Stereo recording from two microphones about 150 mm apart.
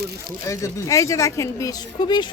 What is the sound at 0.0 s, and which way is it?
Speech, 90° right.